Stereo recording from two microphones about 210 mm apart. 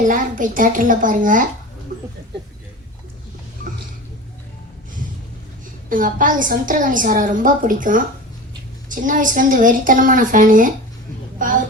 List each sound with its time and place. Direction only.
0.0 s a woman's voice: 40° right (ahead or behind)
5.9 s a woman's voice: 40° right (ahead or behind)
11.3 s a sound: 40° right (ahead or behind)